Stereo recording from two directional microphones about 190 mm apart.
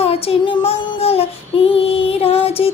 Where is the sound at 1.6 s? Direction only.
30° left (ahead or behind).